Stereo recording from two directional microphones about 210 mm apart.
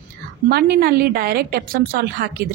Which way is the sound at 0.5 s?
45° right (ahead or behind).